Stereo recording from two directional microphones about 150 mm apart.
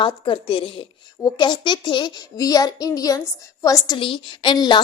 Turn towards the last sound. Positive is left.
turn(degrees=30)  # may be behind; listen again after turning